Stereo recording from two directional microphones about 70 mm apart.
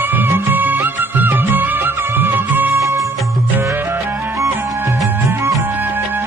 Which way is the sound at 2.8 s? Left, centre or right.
Right.